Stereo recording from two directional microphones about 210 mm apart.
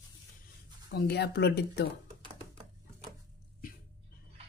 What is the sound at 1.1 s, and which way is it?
Speech, 50° left (ahead or behind).